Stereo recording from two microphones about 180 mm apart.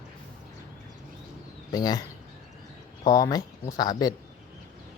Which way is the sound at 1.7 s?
20° left (ahead or behind).